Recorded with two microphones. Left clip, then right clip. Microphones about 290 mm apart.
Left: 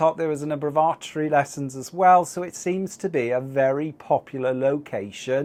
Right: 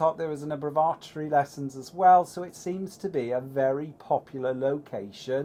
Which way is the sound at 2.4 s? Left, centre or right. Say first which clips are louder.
Left 7 dB; left.